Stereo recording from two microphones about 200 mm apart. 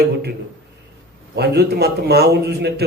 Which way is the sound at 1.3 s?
55° right (ahead or behind).